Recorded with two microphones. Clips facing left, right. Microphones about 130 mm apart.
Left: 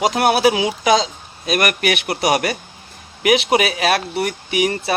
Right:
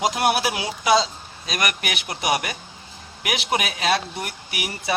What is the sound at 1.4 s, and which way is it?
Speech, 60° left (ahead or behind).